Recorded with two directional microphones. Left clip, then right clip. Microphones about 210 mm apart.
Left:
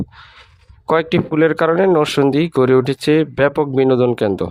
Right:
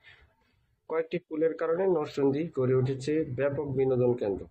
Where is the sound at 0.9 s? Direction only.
50° left (ahead or behind).